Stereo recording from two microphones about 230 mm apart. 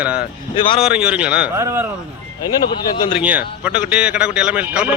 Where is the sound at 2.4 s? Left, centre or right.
Left.